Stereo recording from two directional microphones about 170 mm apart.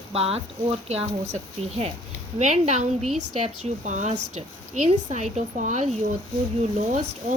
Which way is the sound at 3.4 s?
45° right (ahead or behind).